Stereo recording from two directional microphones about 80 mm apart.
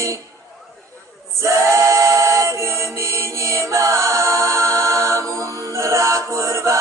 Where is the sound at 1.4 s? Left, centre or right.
Right.